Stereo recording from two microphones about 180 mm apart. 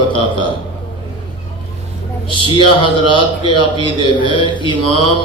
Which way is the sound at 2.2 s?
30° left (ahead or behind).